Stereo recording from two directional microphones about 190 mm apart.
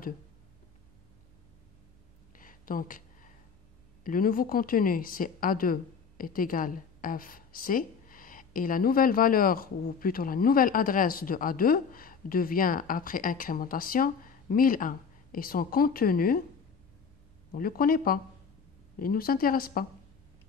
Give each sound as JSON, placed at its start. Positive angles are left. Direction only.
{"t": 2.3, "sound": "a sound", "side_deg": 45}
{"t": 4.0, "sound": "a woman's voice", "side_deg": 50}
{"t": 17.5, "sound": "a woman's voice", "side_deg": 50}